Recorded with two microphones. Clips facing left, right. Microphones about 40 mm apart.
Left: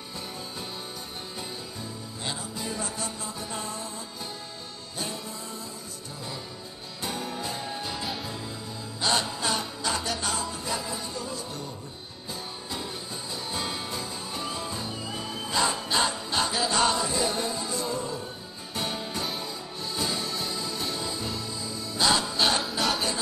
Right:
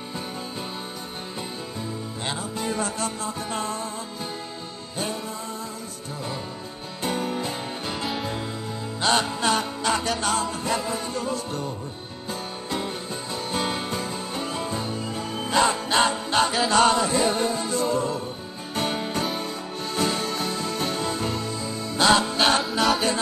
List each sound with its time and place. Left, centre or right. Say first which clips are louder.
2.2 s music: right 5 dB; right
7.0 s music: right 6 dB; right
12.7 s music: right 7 dB; right
22.6 s music: right 5 dB; centre